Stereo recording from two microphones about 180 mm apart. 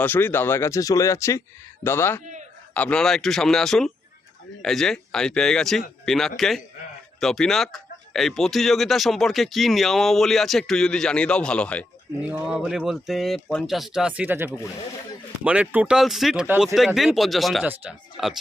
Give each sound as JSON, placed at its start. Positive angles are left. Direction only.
{"t": 0.0, "sound": "speech", "side_deg": 10}
{"t": 12.3, "sound": "speech", "side_deg": -5}